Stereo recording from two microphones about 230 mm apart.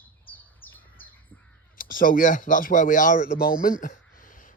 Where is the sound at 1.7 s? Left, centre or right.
Left.